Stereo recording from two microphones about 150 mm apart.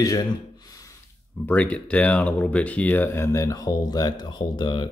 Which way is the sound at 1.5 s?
10° left (ahead or behind).